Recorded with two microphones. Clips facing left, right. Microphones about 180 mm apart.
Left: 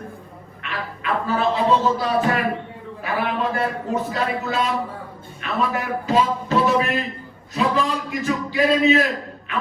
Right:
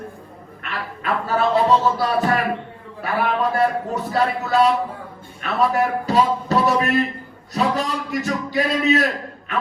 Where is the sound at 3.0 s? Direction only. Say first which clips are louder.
Right 2 dB; 40° right (ahead or behind).